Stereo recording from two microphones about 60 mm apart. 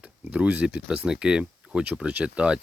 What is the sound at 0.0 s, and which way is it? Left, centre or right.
Speech, right.